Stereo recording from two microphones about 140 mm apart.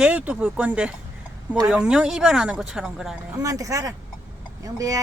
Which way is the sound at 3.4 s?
25° right (ahead or behind).